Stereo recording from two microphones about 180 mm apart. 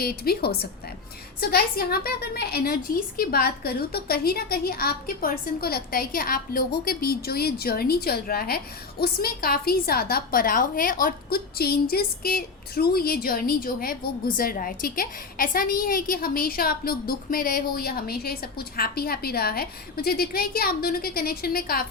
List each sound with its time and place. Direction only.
0.0 s a woman's voice: 60° left (ahead or behind)